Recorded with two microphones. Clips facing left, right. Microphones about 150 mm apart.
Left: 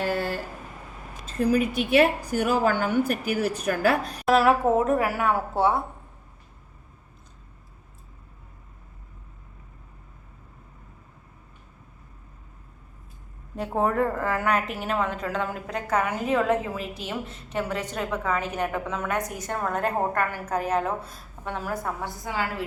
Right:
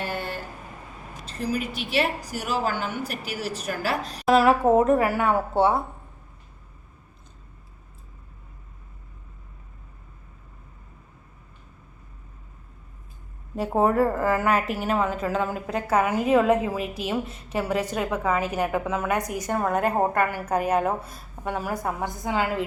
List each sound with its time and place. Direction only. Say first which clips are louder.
2.0 s a woman's voice: left 5 dB; 55° left (ahead or behind)
4.3 s speech: right 2 dB; centre (ahead or behind)
13.6 s speech: right 3 dB; 5° right (ahead or behind); by 22.6 s 20° right (ahead or behind)